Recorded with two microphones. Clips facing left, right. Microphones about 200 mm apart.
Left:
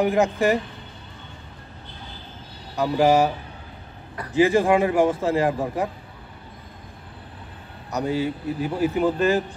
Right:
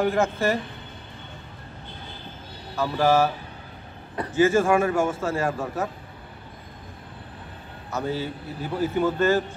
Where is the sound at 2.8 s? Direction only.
15° left (ahead or behind).